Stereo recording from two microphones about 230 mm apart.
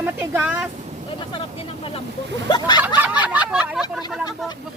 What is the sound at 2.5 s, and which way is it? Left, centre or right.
Speech, centre.